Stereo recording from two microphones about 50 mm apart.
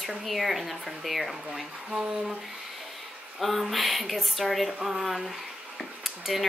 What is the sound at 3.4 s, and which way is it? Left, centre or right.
Speech, centre.